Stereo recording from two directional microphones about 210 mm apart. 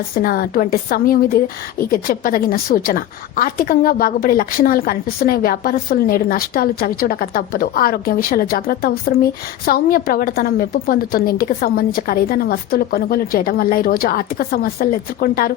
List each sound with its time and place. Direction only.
0.1 s a woman's voice: 45° left (ahead or behind)